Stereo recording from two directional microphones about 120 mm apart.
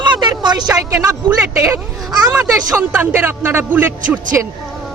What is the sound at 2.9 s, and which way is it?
Speech, 15° right (ahead or behind).